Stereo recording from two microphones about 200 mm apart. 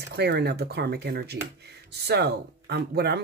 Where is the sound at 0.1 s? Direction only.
55° right (ahead or behind).